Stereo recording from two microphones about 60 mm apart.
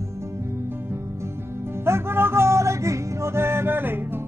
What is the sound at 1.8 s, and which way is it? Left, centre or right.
Music, right.